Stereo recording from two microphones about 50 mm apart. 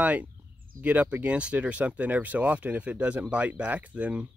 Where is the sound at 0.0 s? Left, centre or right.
Right.